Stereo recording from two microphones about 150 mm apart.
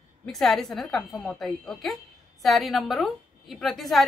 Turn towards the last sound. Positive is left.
turn(degrees=0)  # may be behind; listen again after turning